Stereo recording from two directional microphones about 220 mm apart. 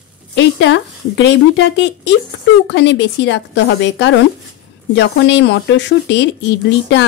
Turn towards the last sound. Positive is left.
turn(degrees=50)  # may be behind; listen again after turning